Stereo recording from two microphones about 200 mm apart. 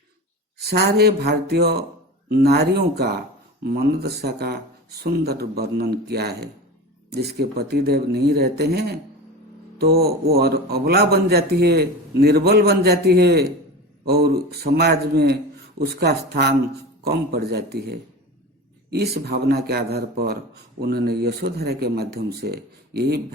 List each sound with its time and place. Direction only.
0.6 s speech: 55° right (ahead or behind)